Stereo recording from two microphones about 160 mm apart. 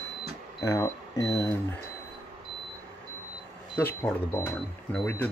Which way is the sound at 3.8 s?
15° left (ahead or behind).